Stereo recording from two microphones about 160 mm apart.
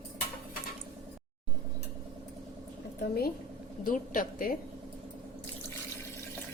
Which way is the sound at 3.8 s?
60° left (ahead or behind).